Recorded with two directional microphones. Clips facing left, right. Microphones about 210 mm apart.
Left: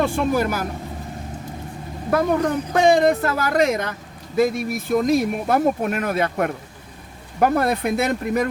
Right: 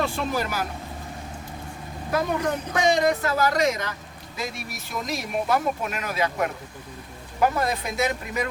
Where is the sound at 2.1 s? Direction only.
50° left (ahead or behind).